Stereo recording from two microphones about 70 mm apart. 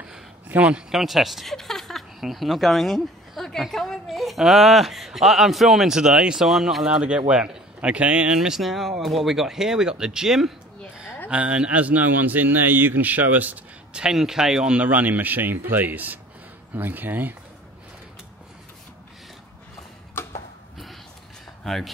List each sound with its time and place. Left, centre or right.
0.5 s speech: centre
0.9 s speech: centre
8.4 s speech: centre
11.2 s a man's voice: centre
14.0 s speech: centre
14.9 s a man's voice: right
21.6 s speech: centre